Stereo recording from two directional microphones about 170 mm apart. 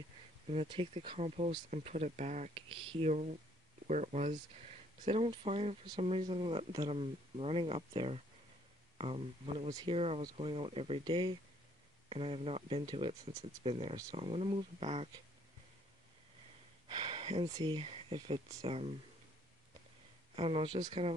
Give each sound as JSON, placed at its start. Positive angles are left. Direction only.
{"t": 0.5, "sound": "speech", "side_deg": -35}
{"t": 9.7, "sound": "speech", "side_deg": -20}
{"t": 9.9, "sound": "speech", "side_deg": -35}
{"t": 16.8, "sound": "speech", "side_deg": -30}
{"t": 20.3, "sound": "speech", "side_deg": -35}